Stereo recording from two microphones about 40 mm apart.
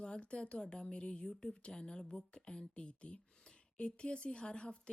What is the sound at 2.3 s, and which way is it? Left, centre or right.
Speech, left.